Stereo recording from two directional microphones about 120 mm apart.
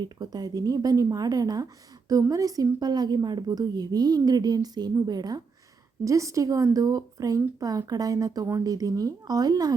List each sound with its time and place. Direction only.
0.0 s a woman's voice: 35° right (ahead or behind)